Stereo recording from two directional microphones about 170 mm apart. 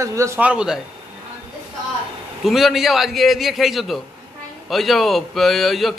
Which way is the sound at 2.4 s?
Centre (ahead or behind).